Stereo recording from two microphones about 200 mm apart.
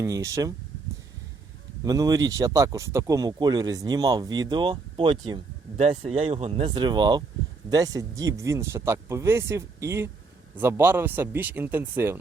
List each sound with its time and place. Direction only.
0.0 s speech: 15° right (ahead or behind)
1.8 s speech: 20° right (ahead or behind)